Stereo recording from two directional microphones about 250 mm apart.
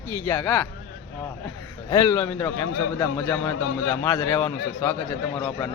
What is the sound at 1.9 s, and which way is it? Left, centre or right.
Speech, centre.